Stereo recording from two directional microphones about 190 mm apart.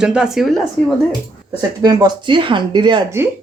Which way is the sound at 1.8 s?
20° right (ahead or behind).